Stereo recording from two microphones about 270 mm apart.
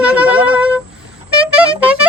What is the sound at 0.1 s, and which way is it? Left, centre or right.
Music, centre.